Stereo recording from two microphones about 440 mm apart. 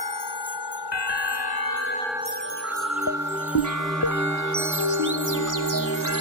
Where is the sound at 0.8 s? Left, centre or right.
Left.